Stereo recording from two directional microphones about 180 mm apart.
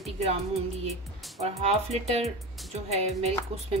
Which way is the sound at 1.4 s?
35° right (ahead or behind).